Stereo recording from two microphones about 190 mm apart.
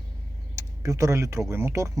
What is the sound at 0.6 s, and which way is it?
Speech, 15° right (ahead or behind).